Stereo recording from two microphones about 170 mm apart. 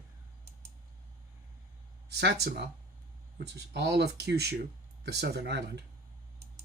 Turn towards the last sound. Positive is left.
turn(degrees=-85)